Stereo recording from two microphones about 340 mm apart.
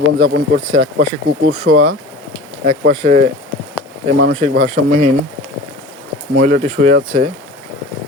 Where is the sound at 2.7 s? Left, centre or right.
Centre.